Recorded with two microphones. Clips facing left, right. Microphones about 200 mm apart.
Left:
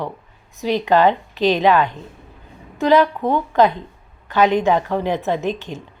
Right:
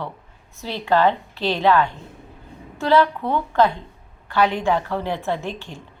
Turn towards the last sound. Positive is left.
turn(degrees=20)  # may be behind; listen again after turning